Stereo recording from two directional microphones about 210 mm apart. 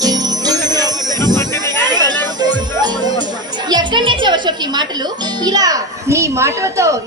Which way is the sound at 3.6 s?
20° right (ahead or behind).